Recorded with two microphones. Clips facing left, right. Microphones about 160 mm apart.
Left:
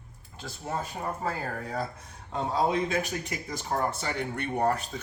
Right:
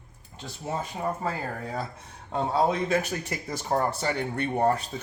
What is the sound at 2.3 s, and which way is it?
Speech, 40° right (ahead or behind).